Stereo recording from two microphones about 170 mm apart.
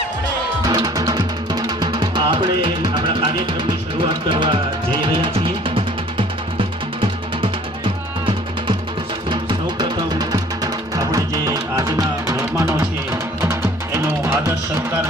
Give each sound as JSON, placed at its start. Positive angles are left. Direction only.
{"t": 0.6, "sound": "music", "side_deg": -20}
{"t": 9.3, "sound": "music", "side_deg": -25}